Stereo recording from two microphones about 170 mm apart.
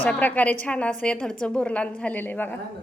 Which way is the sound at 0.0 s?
10° left (ahead or behind).